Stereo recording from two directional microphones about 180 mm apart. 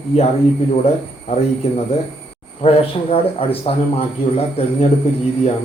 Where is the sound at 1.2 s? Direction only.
35° left (ahead or behind).